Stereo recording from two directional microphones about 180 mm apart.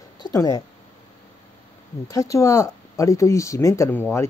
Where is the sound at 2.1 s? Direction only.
20° left (ahead or behind).